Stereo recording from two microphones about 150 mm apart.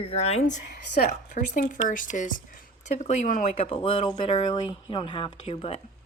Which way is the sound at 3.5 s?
40° left (ahead or behind).